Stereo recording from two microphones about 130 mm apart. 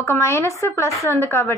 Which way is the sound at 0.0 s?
20° left (ahead or behind).